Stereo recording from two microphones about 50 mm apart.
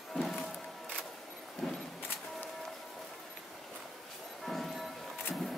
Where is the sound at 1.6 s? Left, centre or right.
Centre.